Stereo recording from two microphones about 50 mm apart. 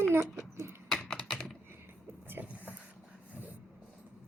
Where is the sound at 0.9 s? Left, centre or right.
Centre.